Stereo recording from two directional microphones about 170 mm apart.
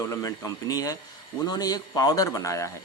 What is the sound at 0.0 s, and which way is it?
Speech, 20° left (ahead or behind).